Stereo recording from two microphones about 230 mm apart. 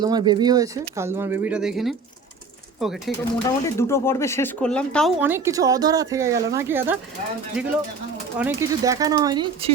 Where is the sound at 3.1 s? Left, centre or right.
Centre.